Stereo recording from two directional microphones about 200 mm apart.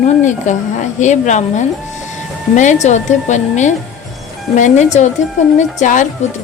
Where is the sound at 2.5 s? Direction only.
35° left (ahead or behind).